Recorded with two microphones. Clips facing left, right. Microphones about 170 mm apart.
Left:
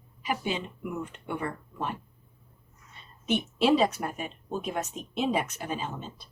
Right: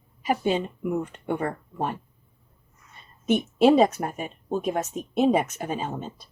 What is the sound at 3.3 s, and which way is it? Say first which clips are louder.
Speech: right 5 dB; 45° right (ahead or behind).